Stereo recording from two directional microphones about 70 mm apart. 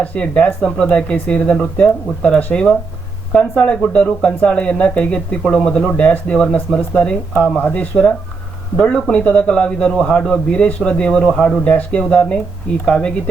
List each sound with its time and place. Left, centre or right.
0.0 s speech: centre